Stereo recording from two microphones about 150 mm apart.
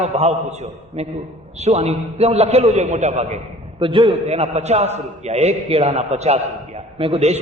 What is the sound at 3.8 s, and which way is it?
Speech, 30° right (ahead or behind).